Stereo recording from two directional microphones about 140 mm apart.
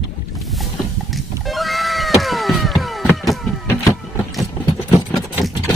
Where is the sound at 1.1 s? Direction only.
Centre (ahead or behind).